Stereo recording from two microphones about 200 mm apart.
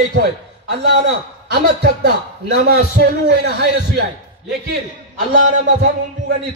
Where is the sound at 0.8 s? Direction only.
55° right (ahead or behind).